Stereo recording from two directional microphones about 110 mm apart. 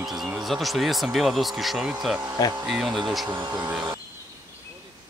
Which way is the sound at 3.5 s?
15° right (ahead or behind).